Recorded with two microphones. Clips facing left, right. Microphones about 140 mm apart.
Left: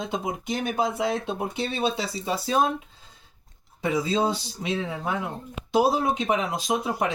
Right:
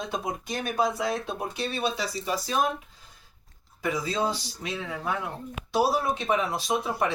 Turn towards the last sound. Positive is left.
turn(degrees=20)  # may be behind; listen again after turning